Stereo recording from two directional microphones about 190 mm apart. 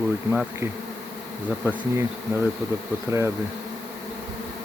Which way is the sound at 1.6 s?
10° right (ahead or behind).